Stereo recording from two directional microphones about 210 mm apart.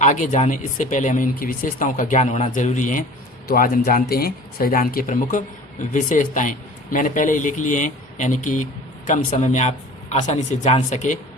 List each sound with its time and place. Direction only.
0.0 s speech: 35° left (ahead or behind)